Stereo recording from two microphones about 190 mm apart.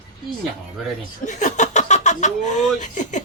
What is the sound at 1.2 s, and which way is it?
Speech, 40° left (ahead or behind).